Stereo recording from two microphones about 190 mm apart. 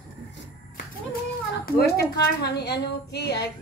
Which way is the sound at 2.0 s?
60° left (ahead or behind).